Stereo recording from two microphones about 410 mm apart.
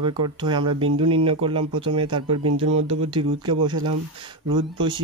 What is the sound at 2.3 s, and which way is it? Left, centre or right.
Speech, right.